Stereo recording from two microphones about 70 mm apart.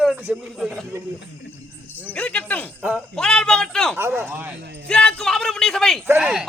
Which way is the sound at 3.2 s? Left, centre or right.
Centre.